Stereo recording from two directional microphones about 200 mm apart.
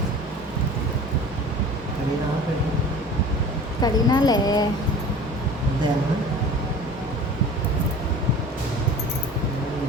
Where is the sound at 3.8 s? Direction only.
20° left (ahead or behind).